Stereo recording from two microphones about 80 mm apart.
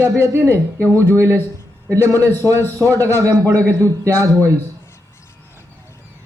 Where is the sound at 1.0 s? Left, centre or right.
Right.